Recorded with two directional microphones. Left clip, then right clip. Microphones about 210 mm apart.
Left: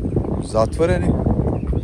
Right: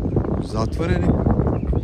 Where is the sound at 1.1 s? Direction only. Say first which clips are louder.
Even; 30° left (ahead or behind).